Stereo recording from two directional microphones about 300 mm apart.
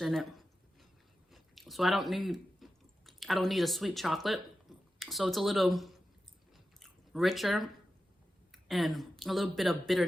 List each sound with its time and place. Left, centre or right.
0.0 s a sound: centre
1.3 s speech: centre
7.1 s speech: centre